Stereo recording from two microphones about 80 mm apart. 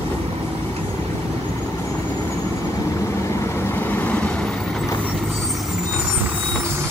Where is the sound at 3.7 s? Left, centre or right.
Left.